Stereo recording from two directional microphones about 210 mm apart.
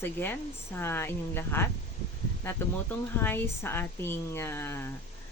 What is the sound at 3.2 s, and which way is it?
Speech, 10° left (ahead or behind).